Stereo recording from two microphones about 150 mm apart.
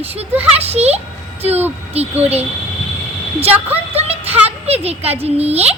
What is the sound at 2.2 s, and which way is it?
Speech, 45° right (ahead or behind).